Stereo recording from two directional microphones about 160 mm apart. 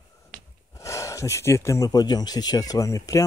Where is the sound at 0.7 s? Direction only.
20° left (ahead or behind).